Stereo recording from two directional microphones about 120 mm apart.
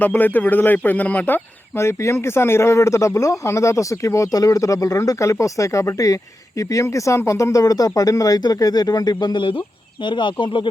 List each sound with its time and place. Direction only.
0.0 s speech: 15° left (ahead or behind); by 10.7 s 45° left (ahead or behind)